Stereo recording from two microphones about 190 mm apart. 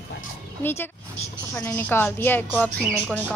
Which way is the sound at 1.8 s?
10° left (ahead or behind).